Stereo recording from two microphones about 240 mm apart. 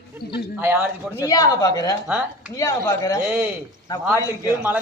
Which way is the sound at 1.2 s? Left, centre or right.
Centre.